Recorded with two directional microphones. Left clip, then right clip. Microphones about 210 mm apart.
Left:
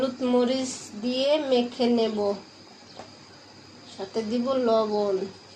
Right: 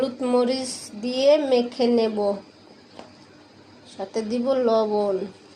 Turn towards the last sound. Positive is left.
turn(degrees=-25)  # may be behind; listen again after turning